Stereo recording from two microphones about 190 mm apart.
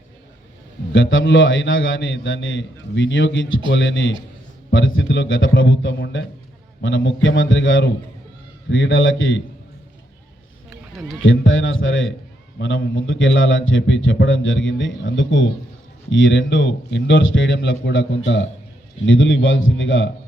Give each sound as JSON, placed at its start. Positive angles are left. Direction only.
{"t": 0.9, "sound": "a man's voice", "side_deg": 90}
{"t": 11.2, "sound": "a man's voice", "side_deg": 90}
{"t": 12.5, "sound": "a man's voice", "side_deg": 80}
{"t": 19.0, "sound": "a man's voice", "side_deg": 90}